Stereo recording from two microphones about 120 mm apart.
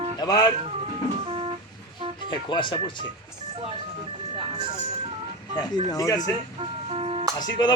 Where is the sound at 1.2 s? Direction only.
45° right (ahead or behind).